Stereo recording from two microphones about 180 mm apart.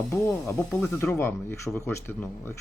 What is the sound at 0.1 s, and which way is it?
Speech, 15° left (ahead or behind).